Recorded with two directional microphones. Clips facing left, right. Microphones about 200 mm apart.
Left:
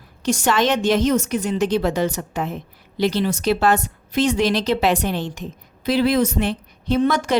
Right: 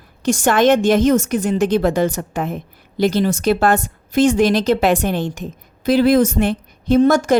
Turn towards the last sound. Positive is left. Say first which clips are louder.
# right 6 dB
turn(degrees=-45)  # may be behind; listen again after turning